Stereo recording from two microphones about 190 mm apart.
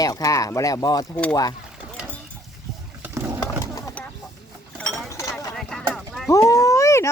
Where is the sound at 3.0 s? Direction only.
15° right (ahead or behind).